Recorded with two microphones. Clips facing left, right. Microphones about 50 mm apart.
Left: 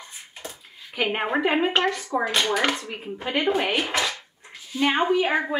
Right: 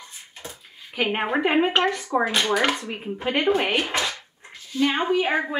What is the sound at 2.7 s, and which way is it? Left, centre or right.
Speech, centre.